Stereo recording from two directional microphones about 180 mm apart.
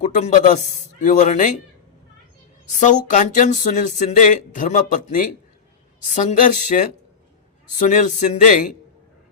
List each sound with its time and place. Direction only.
0.0 s a man's voice: 40° left (ahead or behind)
2.6 s speech: 45° left (ahead or behind)